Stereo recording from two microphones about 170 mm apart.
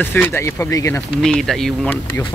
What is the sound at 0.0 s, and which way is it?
Speech, 10° left (ahead or behind).